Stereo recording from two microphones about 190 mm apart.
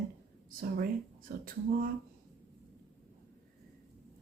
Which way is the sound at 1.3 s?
50° right (ahead or behind).